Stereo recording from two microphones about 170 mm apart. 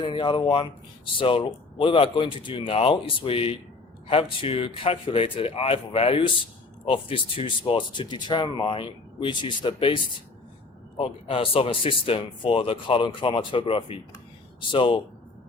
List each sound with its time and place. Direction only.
0.0 s a man's voice: 30° left (ahead or behind)